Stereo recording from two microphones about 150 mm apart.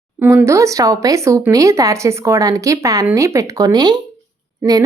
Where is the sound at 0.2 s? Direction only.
15° right (ahead or behind).